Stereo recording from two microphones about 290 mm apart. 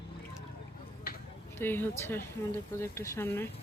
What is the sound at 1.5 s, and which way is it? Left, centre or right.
Speech, centre.